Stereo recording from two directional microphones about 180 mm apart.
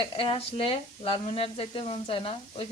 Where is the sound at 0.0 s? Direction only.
30° left (ahead or behind).